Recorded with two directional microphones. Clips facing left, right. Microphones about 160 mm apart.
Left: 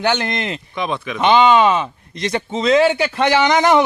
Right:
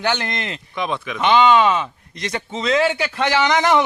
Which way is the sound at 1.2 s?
25° left (ahead or behind).